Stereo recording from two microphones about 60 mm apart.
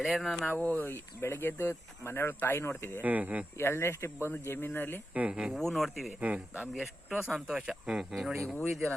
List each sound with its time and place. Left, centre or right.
0.0 s speech: centre
0.6 s speech: left
0.9 s speech: left
3.0 s speech: right
3.6 s speech: left
5.1 s speech: centre
5.5 s speech: centre
6.1 s speech: right
6.8 s speech: centre
7.3 s speech: centre
8.1 s speech: centre